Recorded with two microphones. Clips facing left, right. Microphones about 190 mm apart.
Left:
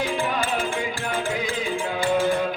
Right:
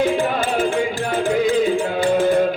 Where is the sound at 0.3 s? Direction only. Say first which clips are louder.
Right 6 dB; 50° right (ahead or behind).